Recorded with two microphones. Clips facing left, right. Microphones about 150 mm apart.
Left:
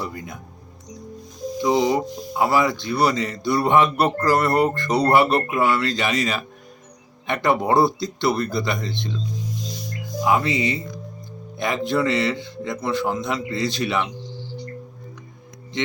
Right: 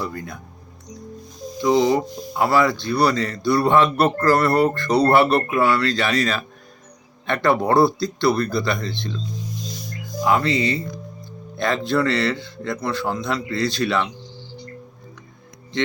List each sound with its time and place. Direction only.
0.0 s speech: 15° left (ahead or behind)
1.6 s speech: 15° left (ahead or behind)
10.2 s speech: 15° left (ahead or behind)